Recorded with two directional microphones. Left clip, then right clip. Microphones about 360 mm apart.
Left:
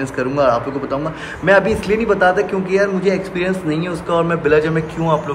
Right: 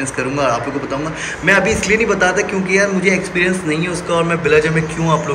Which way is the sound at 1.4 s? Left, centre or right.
Centre.